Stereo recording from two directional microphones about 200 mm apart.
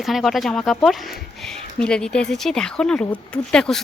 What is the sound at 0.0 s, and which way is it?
A woman's voice, centre (ahead or behind).